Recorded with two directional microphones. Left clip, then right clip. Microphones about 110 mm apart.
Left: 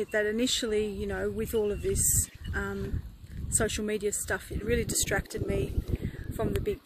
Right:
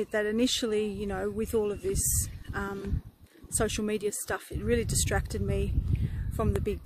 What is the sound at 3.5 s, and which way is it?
Speech, 35° right (ahead or behind).